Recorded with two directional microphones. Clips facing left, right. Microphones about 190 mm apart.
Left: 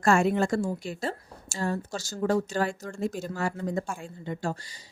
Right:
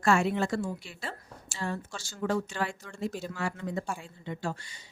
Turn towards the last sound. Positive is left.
turn(degrees=45)  # may be behind; listen again after turning